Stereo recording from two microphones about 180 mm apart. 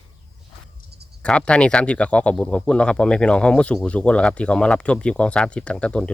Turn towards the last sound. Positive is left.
turn(degrees=5)  # may be behind; listen again after turning